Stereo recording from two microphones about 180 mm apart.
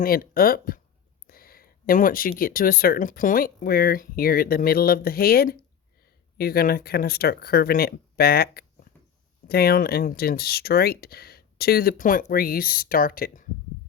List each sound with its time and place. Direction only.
0.0 s speech: 55° left (ahead or behind)